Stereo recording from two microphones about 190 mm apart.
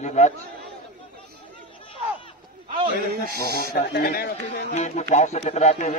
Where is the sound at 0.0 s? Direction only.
35° left (ahead or behind).